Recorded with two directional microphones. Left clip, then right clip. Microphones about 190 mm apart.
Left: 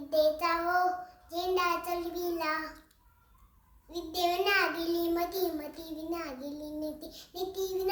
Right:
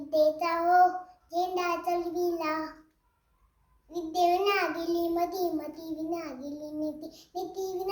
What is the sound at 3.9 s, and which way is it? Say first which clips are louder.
A child's voice: right 5 dB; 20° left (ahead or behind).